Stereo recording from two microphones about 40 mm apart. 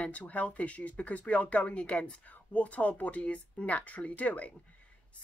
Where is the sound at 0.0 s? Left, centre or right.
Left.